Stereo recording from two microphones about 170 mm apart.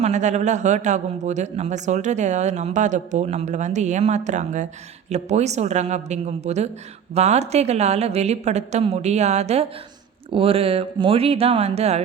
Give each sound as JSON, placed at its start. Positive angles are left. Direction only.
{"t": 0.0, "sound": "a man's voice", "side_deg": -45}